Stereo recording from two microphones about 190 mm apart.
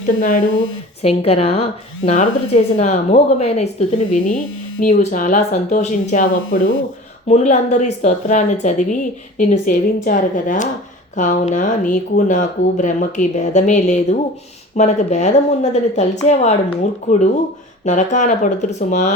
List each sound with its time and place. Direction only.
0.0 s speech: 45° left (ahead or behind)
1.0 s speech: 30° left (ahead or behind)
17.8 s speech: 40° left (ahead or behind)